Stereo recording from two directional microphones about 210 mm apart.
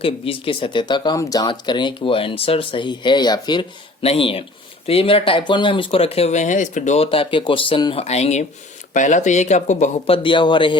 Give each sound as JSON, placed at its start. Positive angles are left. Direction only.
{"t": 0.0, "sound": "speech", "side_deg": 25}
{"t": 10.2, "sound": "speech", "side_deg": 20}